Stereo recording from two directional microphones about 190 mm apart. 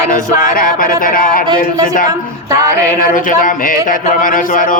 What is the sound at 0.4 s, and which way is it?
A man's voice, 45° left (ahead or behind).